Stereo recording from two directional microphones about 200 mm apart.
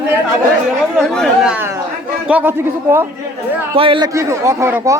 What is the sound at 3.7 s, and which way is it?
A man's voice, 25° right (ahead or behind).